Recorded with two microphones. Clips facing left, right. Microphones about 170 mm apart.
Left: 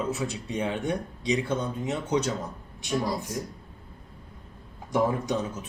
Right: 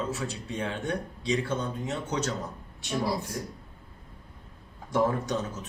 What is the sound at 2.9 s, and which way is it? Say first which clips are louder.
Speech: left 1 dB; 10° right (ahead or behind).